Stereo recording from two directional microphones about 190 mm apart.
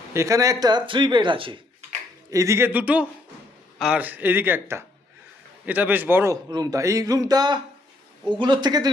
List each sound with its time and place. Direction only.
0.1 s speech: 15° right (ahead or behind)
2.3 s a man's voice: 15° right (ahead or behind)